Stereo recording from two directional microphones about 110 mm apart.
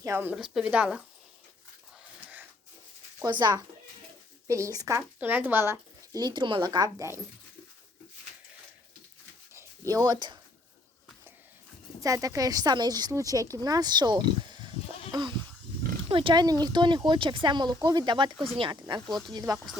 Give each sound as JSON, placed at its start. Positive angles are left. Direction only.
{"t": 0.0, "sound": "speech", "side_deg": -20}
{"t": 0.3, "sound": "speech", "side_deg": -5}
{"t": 3.2, "sound": "speech", "side_deg": -45}
{"t": 4.4, "sound": "speech", "side_deg": -25}
{"t": 5.2, "sound": "speech", "side_deg": -20}
{"t": 6.1, "sound": "speech", "side_deg": -40}
{"t": 9.6, "sound": "a sound", "side_deg": -30}
{"t": 12.0, "sound": "speech", "side_deg": -30}
{"t": 15.1, "sound": "goat", "side_deg": -45}
{"t": 16.0, "sound": "speech", "side_deg": -55}
{"t": 19.0, "sound": "speech", "side_deg": 0}
{"t": 19.3, "sound": "speech", "side_deg": -35}